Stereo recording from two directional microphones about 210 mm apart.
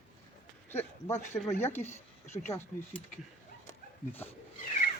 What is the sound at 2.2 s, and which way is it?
Speech, 35° left (ahead or behind).